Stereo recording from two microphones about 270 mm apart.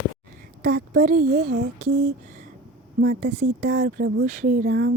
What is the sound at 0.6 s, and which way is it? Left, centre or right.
Speech, right.